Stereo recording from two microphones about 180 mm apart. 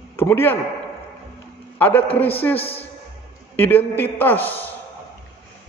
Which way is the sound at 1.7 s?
10° left (ahead or behind).